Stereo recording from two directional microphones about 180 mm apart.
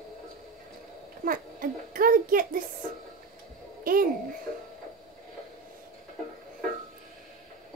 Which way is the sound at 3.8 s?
55° right (ahead or behind).